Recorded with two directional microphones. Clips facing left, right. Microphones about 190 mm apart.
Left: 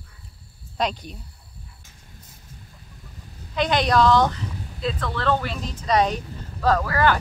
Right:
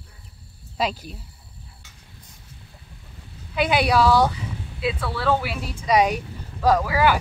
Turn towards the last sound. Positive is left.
turn(degrees=-10)  # may be behind; listen again after turning